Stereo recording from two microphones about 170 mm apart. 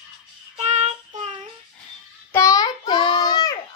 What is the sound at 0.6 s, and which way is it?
Child singing, 40° right (ahead or behind).